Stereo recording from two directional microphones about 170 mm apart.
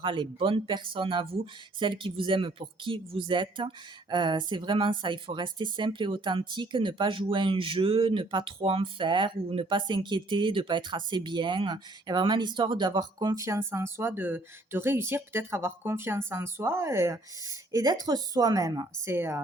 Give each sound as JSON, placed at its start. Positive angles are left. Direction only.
{"t": 0.0, "sound": "speech", "side_deg": -30}